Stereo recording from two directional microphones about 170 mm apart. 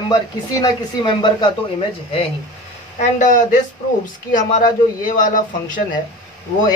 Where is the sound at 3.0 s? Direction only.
45° left (ahead or behind).